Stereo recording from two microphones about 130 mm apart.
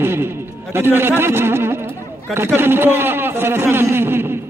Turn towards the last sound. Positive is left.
turn(degrees=-20)  # may be behind; listen again after turning